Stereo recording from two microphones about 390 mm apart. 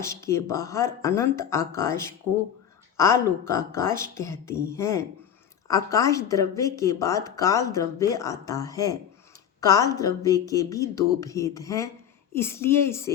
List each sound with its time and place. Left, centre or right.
0.0 s speech: centre
3.0 s speech: centre